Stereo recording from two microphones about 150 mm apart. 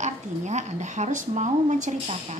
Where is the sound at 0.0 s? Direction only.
50° right (ahead or behind).